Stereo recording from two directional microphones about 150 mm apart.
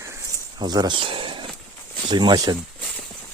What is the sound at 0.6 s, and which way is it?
Speech, 30° right (ahead or behind).